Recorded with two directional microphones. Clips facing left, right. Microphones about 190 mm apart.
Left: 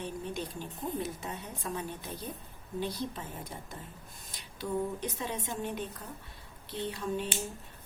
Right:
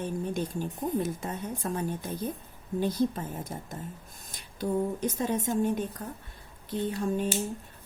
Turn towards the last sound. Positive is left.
turn(degrees=-45)  # may be behind; listen again after turning